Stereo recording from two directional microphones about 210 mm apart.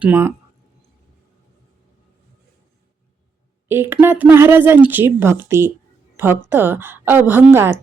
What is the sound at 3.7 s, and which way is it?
A woman's voice, 10° right (ahead or behind).